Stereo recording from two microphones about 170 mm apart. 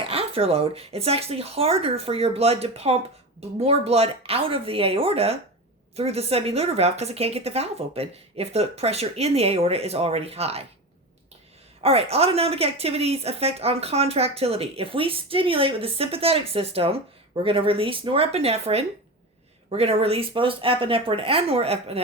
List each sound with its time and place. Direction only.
0.0 s a woman's voice: 35° right (ahead or behind)
11.8 s a woman's voice: 35° right (ahead or behind)